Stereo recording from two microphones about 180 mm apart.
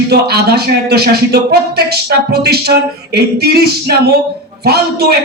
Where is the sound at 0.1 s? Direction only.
65° right (ahead or behind).